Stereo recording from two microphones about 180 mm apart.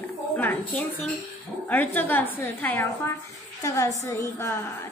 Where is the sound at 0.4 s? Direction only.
10° left (ahead or behind).